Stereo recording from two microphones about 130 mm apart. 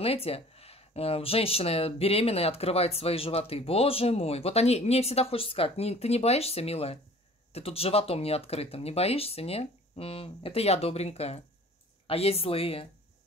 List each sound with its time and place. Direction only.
0.0 s speech: 50° left (ahead or behind)